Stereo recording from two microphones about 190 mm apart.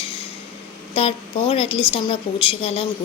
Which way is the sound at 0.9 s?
30° left (ahead or behind).